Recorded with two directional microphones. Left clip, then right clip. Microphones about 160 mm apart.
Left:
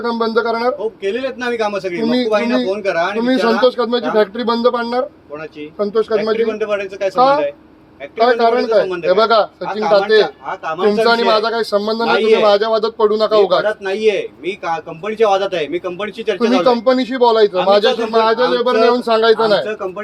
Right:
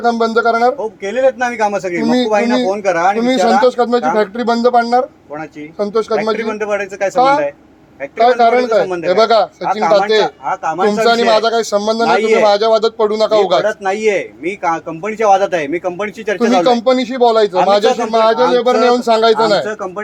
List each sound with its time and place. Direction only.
0.0 s a man's voice: 40° right (ahead or behind)